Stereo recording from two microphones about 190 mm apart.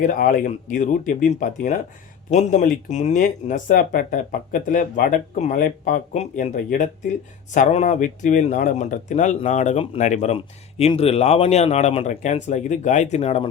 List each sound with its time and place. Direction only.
0.0 s speech: 45° left (ahead or behind)